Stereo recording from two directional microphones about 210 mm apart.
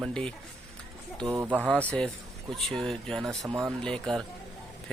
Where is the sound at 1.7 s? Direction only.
5° left (ahead or behind).